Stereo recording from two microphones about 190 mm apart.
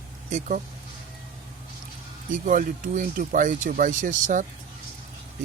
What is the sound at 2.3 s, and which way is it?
Speech, 45° right (ahead or behind).